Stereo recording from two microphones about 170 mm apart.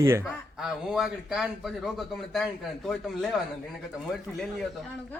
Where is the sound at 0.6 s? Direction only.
Centre (ahead or behind).